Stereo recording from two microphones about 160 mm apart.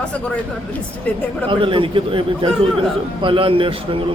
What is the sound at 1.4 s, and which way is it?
Speech, 30° right (ahead or behind).